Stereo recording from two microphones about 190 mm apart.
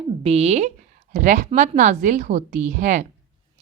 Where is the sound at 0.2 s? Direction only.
35° right (ahead or behind).